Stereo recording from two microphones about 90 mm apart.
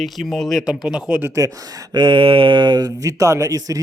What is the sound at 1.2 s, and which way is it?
Speech, 35° right (ahead or behind).